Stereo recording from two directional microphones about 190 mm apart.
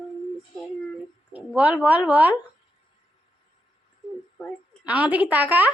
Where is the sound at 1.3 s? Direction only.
5° right (ahead or behind).